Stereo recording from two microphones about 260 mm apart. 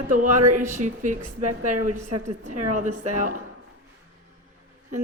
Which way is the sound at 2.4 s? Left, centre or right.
Right.